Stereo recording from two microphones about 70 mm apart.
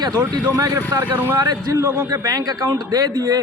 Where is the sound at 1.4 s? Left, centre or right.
Right.